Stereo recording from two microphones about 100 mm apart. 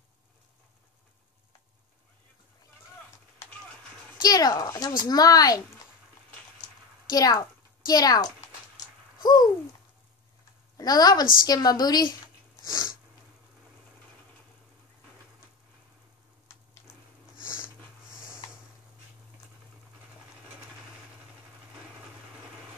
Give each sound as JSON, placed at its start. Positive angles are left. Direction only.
{"t": 4.2, "sound": "speech", "side_deg": 40}
{"t": 7.1, "sound": "a woman's voice", "side_deg": 40}
{"t": 8.7, "sound": "a sound", "side_deg": 45}
{"t": 10.8, "sound": "speech", "side_deg": 40}